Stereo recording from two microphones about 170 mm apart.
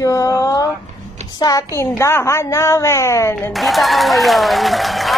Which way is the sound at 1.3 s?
20° left (ahead or behind).